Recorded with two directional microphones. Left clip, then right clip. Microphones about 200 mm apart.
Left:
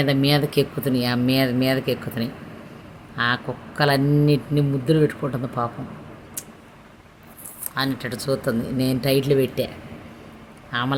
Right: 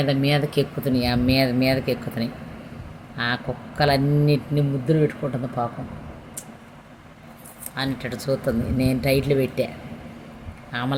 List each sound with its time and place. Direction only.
0.0 s speech: 20° left (ahead or behind)
7.8 s a man's voice: 20° left (ahead or behind)